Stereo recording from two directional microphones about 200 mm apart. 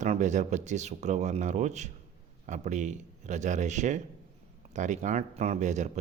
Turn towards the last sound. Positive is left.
turn(degrees=-35)  # may be behind; listen again after turning